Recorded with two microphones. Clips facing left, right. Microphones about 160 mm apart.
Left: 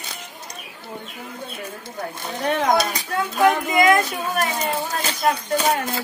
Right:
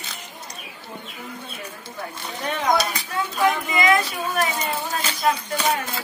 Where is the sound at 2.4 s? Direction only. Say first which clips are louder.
Left 3 dB; 50° left (ahead or behind).